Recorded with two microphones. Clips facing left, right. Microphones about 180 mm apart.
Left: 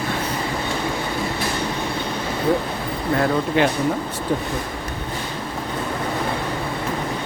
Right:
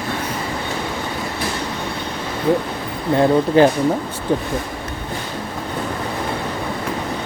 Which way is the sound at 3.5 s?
35° right (ahead or behind).